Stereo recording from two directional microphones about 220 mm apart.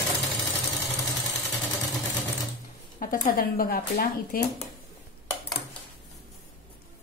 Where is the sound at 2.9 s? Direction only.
40° left (ahead or behind).